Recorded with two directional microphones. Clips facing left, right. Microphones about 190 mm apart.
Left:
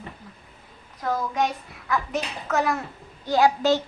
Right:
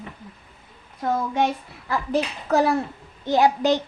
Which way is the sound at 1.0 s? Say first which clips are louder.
Right 2 dB; 30° right (ahead or behind).